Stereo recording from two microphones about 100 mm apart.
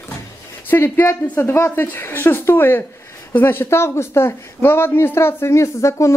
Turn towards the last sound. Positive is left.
turn(degrees=30)  # may be behind; listen again after turning